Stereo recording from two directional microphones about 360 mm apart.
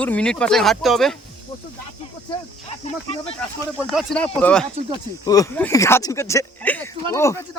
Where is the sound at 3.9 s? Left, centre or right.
Centre.